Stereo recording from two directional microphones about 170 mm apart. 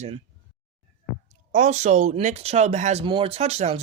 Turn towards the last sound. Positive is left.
turn(degrees=-40)  # may be behind; listen again after turning